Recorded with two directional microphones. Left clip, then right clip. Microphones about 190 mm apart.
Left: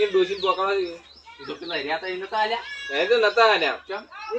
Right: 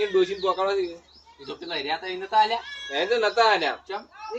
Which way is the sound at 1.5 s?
Centre (ahead or behind).